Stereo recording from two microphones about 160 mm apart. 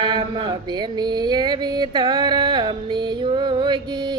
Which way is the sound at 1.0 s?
25° right (ahead or behind).